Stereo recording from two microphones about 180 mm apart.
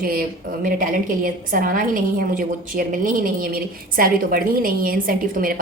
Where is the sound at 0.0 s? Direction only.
55° right (ahead or behind).